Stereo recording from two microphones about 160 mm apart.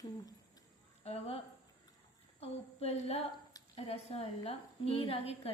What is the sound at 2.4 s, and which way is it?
A woman's voice, 40° left (ahead or behind).